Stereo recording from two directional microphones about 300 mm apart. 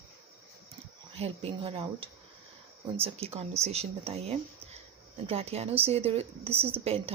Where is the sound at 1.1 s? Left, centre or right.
Centre.